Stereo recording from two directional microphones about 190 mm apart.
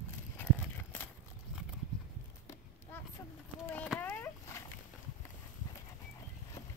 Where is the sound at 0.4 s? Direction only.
10° left (ahead or behind).